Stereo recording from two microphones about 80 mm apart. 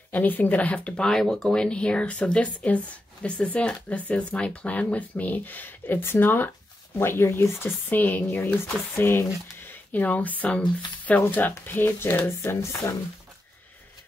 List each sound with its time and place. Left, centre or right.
0.1 s speech: left